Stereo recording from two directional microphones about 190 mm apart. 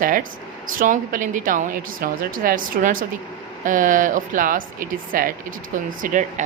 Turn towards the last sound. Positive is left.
turn(degrees=-40)  # may be behind; listen again after turning